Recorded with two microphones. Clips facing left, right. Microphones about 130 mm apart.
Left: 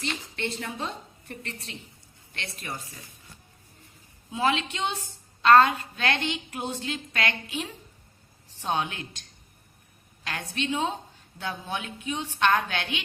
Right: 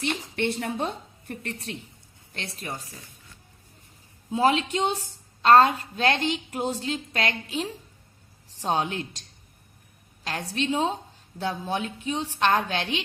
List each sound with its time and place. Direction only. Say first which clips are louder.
0.0 s a woman's voice: right 5 dB; 60° right (ahead or behind)
2.3 s a woman's voice: right 2 dB; 35° right (ahead or behind)
4.3 s a woman's voice: right 4 dB; 40° right (ahead or behind)
10.2 s a woman's voice: right 3 dB; 35° right (ahead or behind)